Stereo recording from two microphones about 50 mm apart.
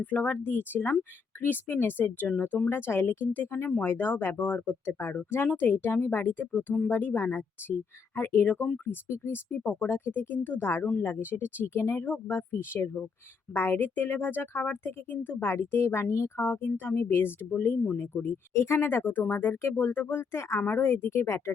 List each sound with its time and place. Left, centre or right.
0.0 s speech: left
2.6 s speech: left
4.2 s speech: left
4.4 s speech: left
10.6 s speech: left
18.5 s speech: left